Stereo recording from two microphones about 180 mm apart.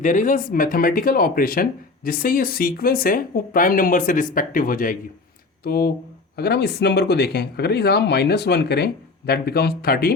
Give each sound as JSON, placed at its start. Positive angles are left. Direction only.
{"t": 0.0, "sound": "speech", "side_deg": 45}